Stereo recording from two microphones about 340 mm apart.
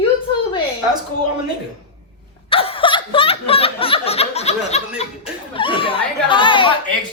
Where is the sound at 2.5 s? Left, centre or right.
Centre.